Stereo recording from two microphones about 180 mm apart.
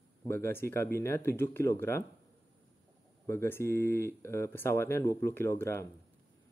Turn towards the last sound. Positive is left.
turn(degrees=15)  # may be behind; listen again after turning